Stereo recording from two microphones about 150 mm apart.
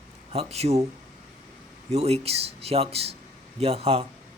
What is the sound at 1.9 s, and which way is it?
Speech, 45° right (ahead or behind).